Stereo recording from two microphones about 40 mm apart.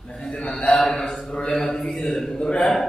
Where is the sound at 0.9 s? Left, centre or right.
Centre.